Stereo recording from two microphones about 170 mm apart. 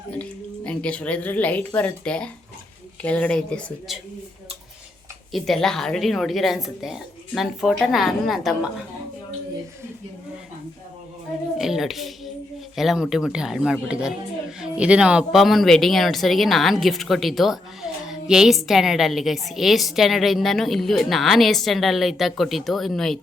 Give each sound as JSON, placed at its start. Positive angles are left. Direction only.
{"t": 0.1, "sound": "a woman's voice", "side_deg": 5}
{"t": 5.3, "sound": "a woman's voice", "side_deg": 0}
{"t": 11.5, "sound": "a sound", "side_deg": 0}
{"t": 12.7, "sound": "a woman's voice", "side_deg": 0}